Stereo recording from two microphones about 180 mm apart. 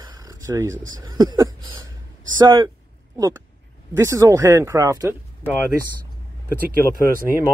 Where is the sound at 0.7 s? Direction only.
90° right.